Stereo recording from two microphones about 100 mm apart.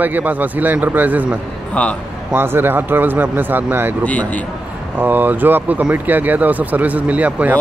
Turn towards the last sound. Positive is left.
turn(degrees=-15)  # may be behind; listen again after turning